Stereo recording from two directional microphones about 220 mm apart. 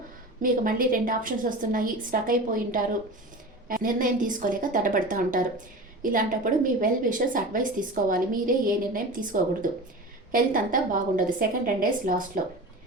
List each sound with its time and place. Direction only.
0.4 s a woman's voice: 40° right (ahead or behind)